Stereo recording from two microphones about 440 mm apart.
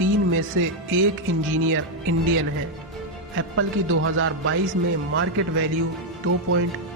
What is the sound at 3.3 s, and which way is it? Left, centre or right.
A man's voice, right.